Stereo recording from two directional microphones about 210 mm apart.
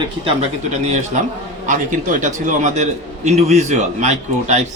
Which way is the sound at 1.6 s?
35° right (ahead or behind).